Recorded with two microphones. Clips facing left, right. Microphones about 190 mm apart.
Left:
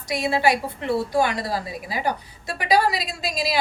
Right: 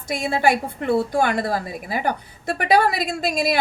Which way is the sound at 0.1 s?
50° right (ahead or behind).